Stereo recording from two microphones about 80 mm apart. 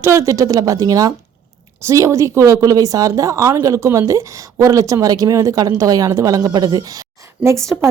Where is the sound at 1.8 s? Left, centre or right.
Right.